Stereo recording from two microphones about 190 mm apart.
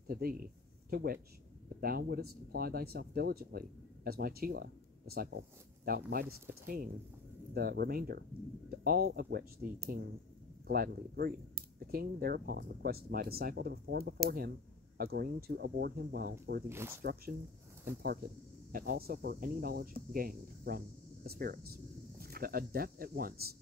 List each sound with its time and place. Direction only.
0.1 s speech: 50° right (ahead or behind)
16.6 s speech: 15° right (ahead or behind)
17.0 s speech: 55° right (ahead or behind)
18.7 s speech: 50° right (ahead or behind)